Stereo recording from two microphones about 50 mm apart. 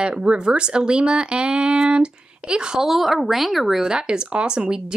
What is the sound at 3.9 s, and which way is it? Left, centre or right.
Speech, centre.